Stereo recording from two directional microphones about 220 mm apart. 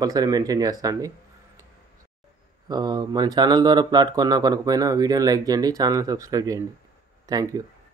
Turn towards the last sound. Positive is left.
turn(degrees=-15)  # may be behind; listen again after turning